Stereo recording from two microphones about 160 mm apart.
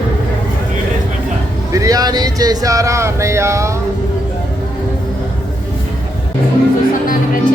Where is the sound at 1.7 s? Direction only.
20° right (ahead or behind).